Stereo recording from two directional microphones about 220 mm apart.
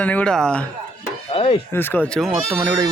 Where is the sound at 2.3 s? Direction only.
10° right (ahead or behind).